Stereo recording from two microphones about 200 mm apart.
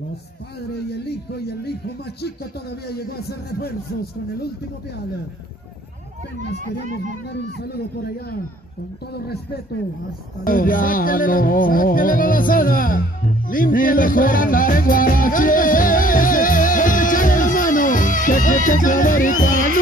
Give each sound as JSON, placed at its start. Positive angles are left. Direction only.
{"t": 0.6, "sound": "speech", "side_deg": 55}
{"t": 2.9, "sound": "speech", "side_deg": 50}
{"t": 6.8, "sound": "speech", "side_deg": -40}
{"t": 7.6, "sound": "speech", "side_deg": 50}
{"t": 10.4, "sound": "music", "side_deg": 45}